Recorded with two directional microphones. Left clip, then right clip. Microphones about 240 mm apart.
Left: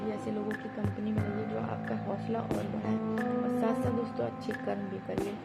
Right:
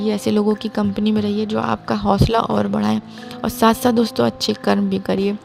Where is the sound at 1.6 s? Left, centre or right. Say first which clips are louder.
Right 17 dB; right.